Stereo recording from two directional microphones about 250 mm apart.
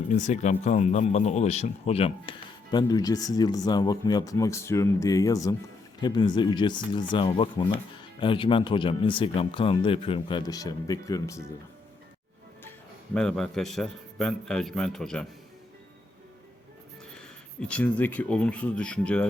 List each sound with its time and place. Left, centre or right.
0.1 s speech: left; by 11.4 s centre
13.1 s a man's voice: centre
17.2 s speech: centre